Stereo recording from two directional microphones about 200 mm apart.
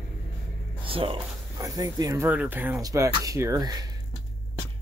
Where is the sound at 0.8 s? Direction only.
25° right (ahead or behind).